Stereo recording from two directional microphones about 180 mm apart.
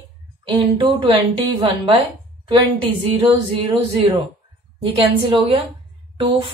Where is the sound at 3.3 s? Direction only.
30° right (ahead or behind).